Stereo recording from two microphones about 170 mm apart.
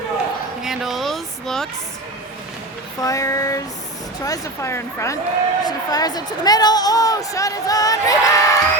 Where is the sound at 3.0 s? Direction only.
20° left (ahead or behind).